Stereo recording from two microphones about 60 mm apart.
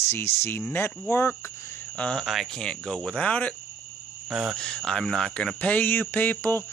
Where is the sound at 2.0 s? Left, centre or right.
Centre.